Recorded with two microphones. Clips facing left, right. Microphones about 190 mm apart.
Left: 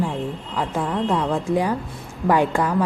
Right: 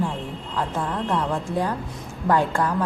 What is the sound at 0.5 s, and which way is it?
A woman's voice, 10° left (ahead or behind).